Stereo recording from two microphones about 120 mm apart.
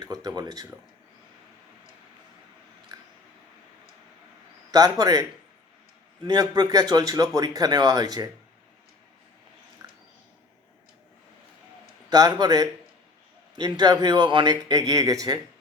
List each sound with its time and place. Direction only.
0.0 s speech: 30° right (ahead or behind)
4.7 s speech: 30° right (ahead or behind)
6.2 s speech: 35° right (ahead or behind)
9.8 s a sound: 30° right (ahead or behind)
12.1 s speech: 30° right (ahead or behind)